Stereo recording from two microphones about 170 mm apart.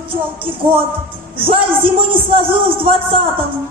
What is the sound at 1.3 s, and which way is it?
A man's voice, 30° right (ahead or behind).